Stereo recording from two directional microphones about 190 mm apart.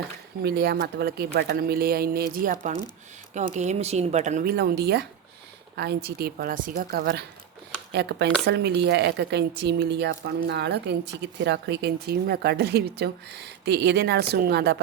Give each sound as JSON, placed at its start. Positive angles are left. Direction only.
{"t": 0.4, "sound": "a woman's voice", "side_deg": -55}
{"t": 4.5, "sound": "a woman's voice", "side_deg": -55}
{"t": 7.9, "sound": "a woman's voice", "side_deg": -60}